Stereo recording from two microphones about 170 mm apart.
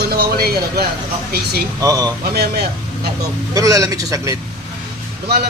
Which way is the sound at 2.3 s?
65° right (ahead or behind).